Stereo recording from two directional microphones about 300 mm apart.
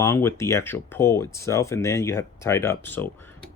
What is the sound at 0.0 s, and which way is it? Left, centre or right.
Speech, centre.